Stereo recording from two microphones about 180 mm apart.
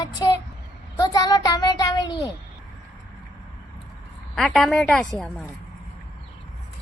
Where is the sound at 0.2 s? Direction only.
25° left (ahead or behind).